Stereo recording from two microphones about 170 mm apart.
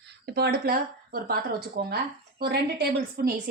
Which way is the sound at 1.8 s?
90° right.